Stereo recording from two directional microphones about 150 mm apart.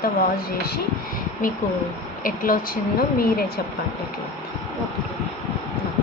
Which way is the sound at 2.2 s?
70° left (ahead or behind).